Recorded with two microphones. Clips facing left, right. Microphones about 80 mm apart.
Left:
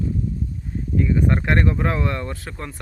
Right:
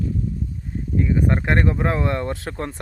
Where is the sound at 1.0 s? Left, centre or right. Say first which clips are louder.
Even; centre.